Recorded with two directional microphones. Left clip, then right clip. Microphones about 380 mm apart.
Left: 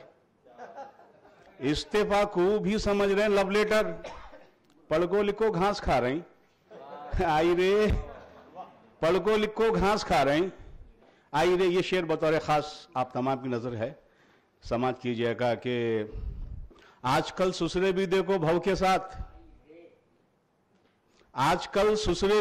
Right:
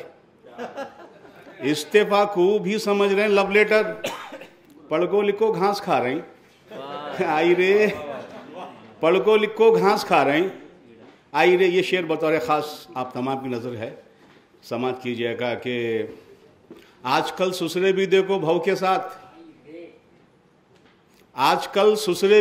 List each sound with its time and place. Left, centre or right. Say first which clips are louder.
1.6 s a man's voice: right 8 dB; left
4.8 s a man's voice: right 5 dB; left
9.1 s a man's voice: right 8 dB; left
21.3 s a man's voice: right 6 dB; left